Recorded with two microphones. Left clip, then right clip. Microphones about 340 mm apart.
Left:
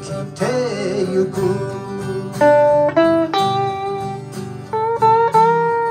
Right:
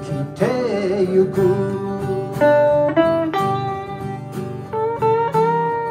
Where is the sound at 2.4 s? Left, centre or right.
Centre.